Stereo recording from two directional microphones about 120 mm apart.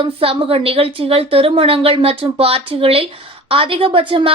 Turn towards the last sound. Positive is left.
turn(degrees=-50)  # may be behind; listen again after turning